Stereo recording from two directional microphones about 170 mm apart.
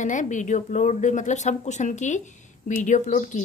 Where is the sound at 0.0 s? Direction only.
45° left (ahead or behind).